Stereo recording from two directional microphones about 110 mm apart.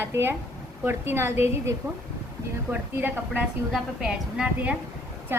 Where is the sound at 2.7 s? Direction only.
15° right (ahead or behind).